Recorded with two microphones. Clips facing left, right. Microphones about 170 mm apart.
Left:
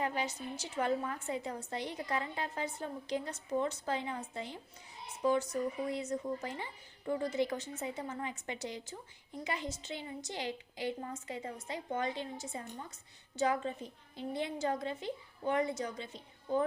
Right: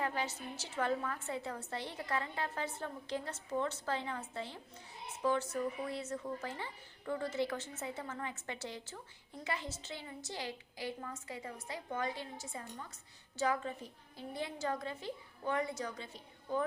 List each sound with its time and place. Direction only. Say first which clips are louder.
0.0 s a woman's voice: left 2 dB; 15° left (ahead or behind)